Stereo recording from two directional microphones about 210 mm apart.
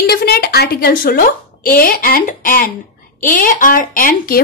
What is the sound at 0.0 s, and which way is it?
A woman's voice, 50° left (ahead or behind).